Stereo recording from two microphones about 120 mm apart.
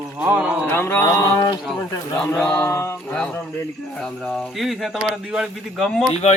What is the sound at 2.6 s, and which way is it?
Speech, 25° left (ahead or behind).